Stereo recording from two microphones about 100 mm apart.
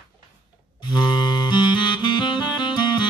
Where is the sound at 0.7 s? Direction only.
50° left (ahead or behind).